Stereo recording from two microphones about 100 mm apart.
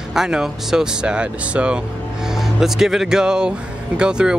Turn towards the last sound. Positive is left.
turn(degrees=-10)  # may be behind; listen again after turning